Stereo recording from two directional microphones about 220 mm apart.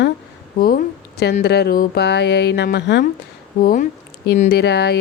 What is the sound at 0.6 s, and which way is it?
Speech, 40° left (ahead or behind).